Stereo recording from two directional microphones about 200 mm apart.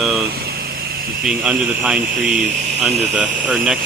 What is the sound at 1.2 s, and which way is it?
Speech, 5° right (ahead or behind).